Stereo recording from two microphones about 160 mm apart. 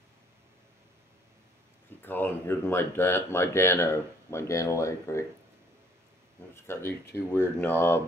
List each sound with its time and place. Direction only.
2.0 s speech: 15° left (ahead or behind)
6.5 s speech: 15° left (ahead or behind)